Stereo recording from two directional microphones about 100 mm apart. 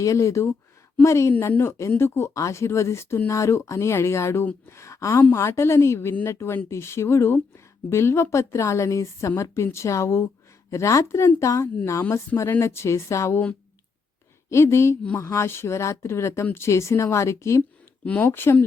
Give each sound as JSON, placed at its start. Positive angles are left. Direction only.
{"t": 0.0, "sound": "speech", "side_deg": 30}
{"t": 14.5, "sound": "speech", "side_deg": 30}
{"t": 18.0, "sound": "speech", "side_deg": 15}